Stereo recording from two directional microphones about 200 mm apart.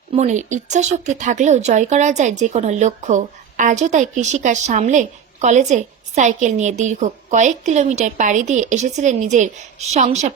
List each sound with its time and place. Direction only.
0.1 s speech: 35° right (ahead or behind)